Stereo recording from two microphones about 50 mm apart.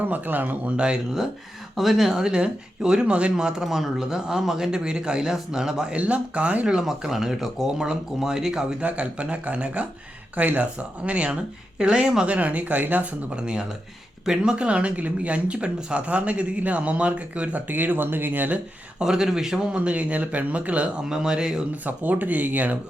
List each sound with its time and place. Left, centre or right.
0.0 s speech: right
1.7 s speech: centre
6.0 s speech: right
6.7 s speech: centre
8.8 s speech: right
13.3 s speech: centre; by 18.6 s right
18.9 s speech: centre
19.8 s speech: right
21.1 s speech: centre
21.8 s speech: right